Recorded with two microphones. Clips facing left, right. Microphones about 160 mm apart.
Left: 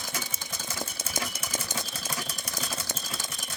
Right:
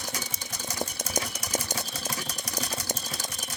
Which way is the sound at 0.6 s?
40° right (ahead or behind).